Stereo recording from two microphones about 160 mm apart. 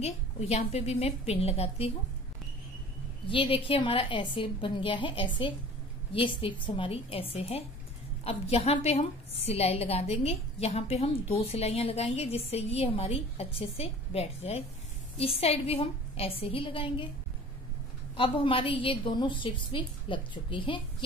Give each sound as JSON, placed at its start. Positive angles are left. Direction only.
{"t": 0.0, "sound": "a woman's voice", "side_deg": 40}
{"t": 3.3, "sound": "a woman's voice", "side_deg": 35}
{"t": 18.1, "sound": "a woman's voice", "side_deg": 35}